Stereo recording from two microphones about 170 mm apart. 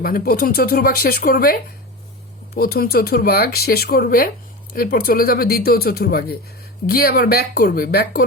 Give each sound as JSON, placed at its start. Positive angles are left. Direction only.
{"t": 0.0, "sound": "speech", "side_deg": 55}
{"t": 2.6, "sound": "speech", "side_deg": 60}